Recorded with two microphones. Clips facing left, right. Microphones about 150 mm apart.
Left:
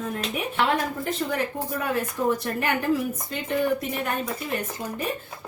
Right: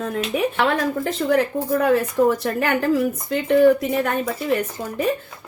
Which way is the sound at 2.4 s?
75° right (ahead or behind).